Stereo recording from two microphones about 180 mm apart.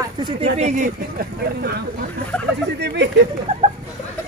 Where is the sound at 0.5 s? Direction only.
45° right (ahead or behind).